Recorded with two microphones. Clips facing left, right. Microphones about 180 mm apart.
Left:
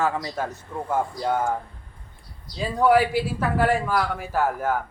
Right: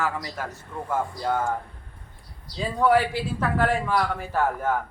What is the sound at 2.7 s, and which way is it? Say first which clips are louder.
A man's voice: left 2 dB; 5° left (ahead or behind).